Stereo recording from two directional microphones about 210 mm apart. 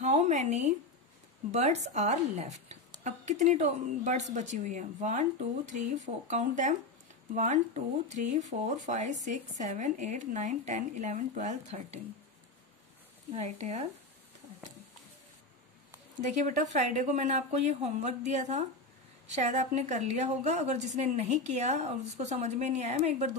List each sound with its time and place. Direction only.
0.0 s a sound: 35° right (ahead or behind)
1.5 s speech: 30° right (ahead or behind)
6.2 s speech: 35° right (ahead or behind)
13.3 s speech: 30° right (ahead or behind)
16.2 s speech: 35° right (ahead or behind)